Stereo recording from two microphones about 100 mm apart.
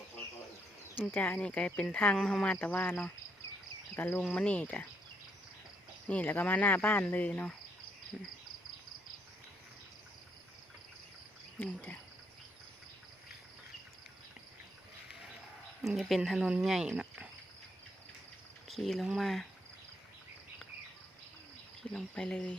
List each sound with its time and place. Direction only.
1.1 s speech: 15° left (ahead or behind)
3.9 s cricket: 20° left (ahead or behind)
4.4 s speech: 15° left (ahead or behind)
6.1 s speech: 15° left (ahead or behind)
11.6 s speech: 20° left (ahead or behind)
16.0 s speech: centre (ahead or behind)
18.7 s speech: centre (ahead or behind)
21.9 s speech: 10° left (ahead or behind)